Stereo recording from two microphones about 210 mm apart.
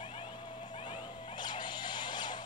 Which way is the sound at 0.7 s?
25° left (ahead or behind).